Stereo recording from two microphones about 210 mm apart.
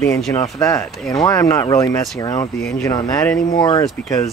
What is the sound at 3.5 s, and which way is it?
Speech, 20° left (ahead or behind).